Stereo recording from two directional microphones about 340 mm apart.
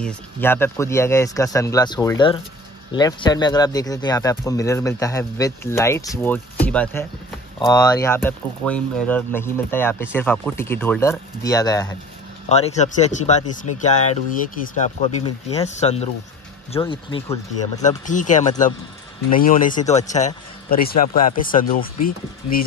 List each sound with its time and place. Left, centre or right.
0.0 s a man's voice: centre
15.0 s a man's voice: centre
17.8 s a man's voice: left